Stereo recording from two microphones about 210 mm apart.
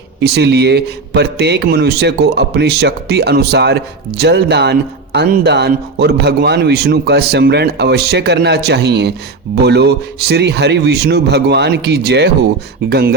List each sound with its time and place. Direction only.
0.2 s a man's voice: 50° right (ahead or behind)